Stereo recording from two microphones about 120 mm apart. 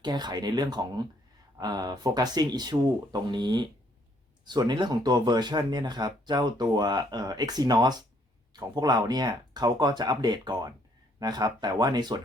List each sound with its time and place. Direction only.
0.0 s speech: 35° right (ahead or behind)